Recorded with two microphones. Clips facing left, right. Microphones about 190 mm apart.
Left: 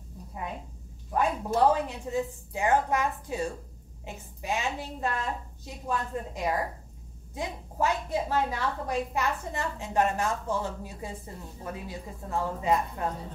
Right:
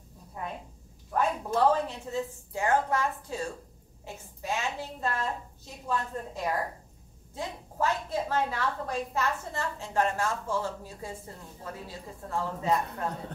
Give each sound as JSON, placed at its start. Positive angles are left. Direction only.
{"t": 1.1, "sound": "a woman's voice", "side_deg": 15}